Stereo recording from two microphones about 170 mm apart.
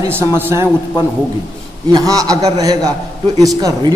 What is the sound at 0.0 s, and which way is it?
Speech, 15° right (ahead or behind).